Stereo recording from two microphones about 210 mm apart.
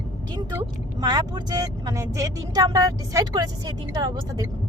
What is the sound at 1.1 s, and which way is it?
Speech, 20° right (ahead or behind).